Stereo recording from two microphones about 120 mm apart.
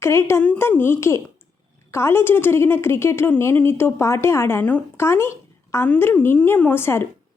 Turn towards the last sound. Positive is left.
turn(degrees=20)  # may be behind; listen again after turning